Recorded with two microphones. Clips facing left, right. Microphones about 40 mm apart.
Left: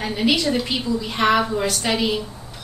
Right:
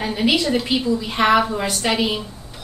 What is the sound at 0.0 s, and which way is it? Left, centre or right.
A woman's voice, centre.